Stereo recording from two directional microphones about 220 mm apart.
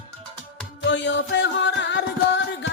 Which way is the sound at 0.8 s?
55° left (ahead or behind).